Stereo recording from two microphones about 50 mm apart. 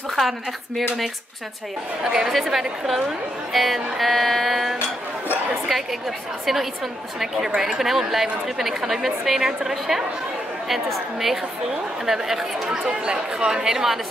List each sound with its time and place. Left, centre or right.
2.0 s speech: centre
2.3 s speech: centre